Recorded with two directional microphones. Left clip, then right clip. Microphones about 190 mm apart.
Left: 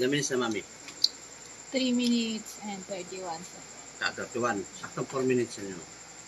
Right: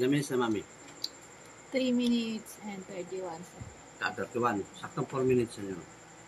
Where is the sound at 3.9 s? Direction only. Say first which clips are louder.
Left 1 dB; 55° right (ahead or behind).